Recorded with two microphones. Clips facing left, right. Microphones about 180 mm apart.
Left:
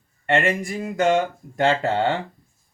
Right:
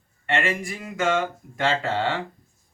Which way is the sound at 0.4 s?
40° left (ahead or behind).